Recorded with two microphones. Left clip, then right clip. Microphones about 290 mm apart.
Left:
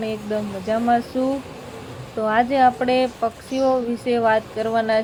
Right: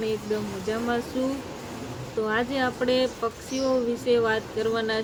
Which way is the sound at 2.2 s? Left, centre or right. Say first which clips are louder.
Left 10 dB; centre.